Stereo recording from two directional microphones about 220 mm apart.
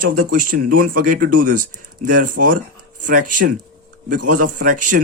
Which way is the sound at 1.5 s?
40° right (ahead or behind).